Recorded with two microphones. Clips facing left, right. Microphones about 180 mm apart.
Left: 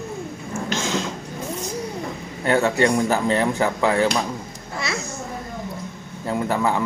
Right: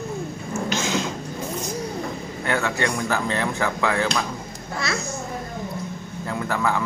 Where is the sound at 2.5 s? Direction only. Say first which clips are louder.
Left 6 dB; 30° left (ahead or behind).